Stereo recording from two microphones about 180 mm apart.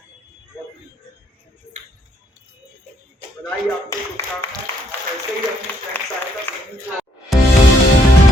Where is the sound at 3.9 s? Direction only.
15° left (ahead or behind).